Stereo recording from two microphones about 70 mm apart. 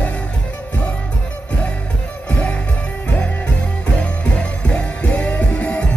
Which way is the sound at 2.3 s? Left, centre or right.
Centre.